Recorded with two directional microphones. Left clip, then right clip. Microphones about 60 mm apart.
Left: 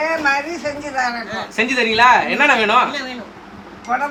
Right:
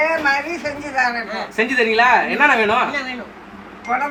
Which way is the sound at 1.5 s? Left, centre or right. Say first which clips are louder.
Right 1 dB; left.